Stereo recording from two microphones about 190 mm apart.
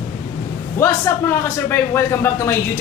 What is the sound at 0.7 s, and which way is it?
Speech, 15° left (ahead or behind).